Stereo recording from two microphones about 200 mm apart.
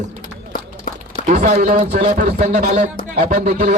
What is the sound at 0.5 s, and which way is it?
Run, 40° left (ahead or behind).